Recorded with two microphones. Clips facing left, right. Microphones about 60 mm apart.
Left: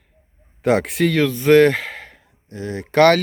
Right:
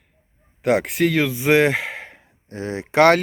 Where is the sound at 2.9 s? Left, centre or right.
Centre.